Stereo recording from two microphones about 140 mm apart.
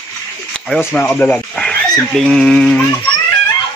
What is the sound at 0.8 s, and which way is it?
Speech, 15° left (ahead or behind).